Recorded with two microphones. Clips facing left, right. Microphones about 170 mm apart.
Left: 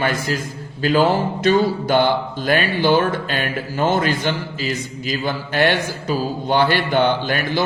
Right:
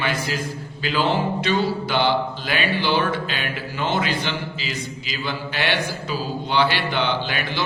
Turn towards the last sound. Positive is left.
turn(degrees=45)  # may be behind; listen again after turning